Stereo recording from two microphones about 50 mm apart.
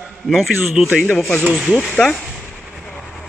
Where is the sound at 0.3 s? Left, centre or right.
Centre.